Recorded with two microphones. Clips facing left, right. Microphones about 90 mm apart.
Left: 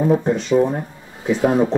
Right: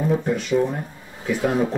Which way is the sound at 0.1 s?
30° left (ahead or behind).